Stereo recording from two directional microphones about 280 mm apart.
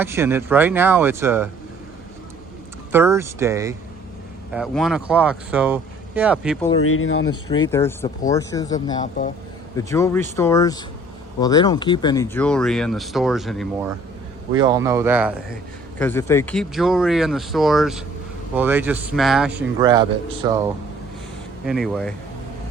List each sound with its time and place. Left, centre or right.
0.0 s speech: centre
2.9 s speech: centre
6.8 s speech: left
7.7 s speech: centre
14.5 s speech: centre
16.0 s speech: centre
19.8 s speech: centre
21.7 s speech: centre